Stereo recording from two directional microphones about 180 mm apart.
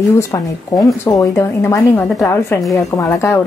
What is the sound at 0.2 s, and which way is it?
A woman's voice, 20° left (ahead or behind).